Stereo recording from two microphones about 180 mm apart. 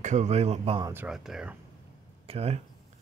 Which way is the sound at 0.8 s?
10° right (ahead or behind).